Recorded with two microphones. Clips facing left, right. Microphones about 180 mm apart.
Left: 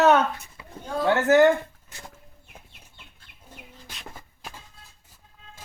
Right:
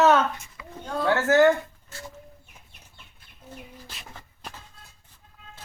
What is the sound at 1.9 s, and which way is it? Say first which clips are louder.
Chicken: right 5 dB; 15° left (ahead or behind).